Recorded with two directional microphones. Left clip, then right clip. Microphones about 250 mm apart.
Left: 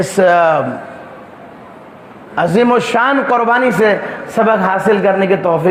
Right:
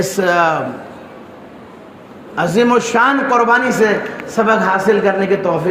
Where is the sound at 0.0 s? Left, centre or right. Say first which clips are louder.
Left 4 dB; left.